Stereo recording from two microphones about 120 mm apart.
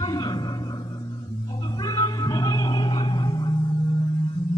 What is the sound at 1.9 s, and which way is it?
Music, 35° left (ahead or behind).